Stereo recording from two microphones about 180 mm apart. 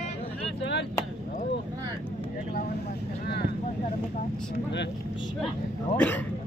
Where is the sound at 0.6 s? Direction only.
75° left (ahead or behind).